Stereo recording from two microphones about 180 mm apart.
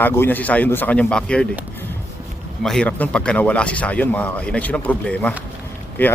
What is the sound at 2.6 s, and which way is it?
Speech, 5° left (ahead or behind).